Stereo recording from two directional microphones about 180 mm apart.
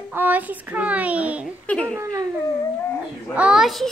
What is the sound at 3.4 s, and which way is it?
Speech, 5° right (ahead or behind).